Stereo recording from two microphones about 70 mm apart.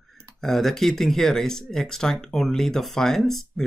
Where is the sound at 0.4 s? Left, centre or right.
Centre.